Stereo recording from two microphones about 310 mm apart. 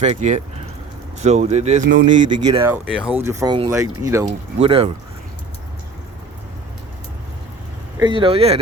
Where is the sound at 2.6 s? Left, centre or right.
Centre.